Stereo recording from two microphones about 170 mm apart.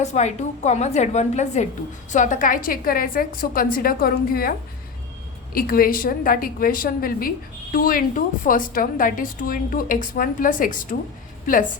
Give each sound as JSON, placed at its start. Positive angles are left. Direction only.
{"t": 0.0, "sound": "a woman's voice", "side_deg": 45}
{"t": 5.5, "sound": "a woman's voice", "side_deg": 60}